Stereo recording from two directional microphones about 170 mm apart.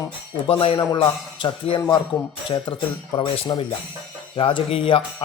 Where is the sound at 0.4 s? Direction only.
35° left (ahead or behind).